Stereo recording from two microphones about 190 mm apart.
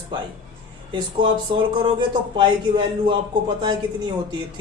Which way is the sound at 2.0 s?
25° right (ahead or behind).